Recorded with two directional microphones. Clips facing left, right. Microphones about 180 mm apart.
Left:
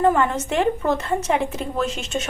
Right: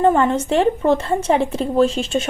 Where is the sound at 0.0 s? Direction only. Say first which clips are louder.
Right 3 dB; 30° right (ahead or behind).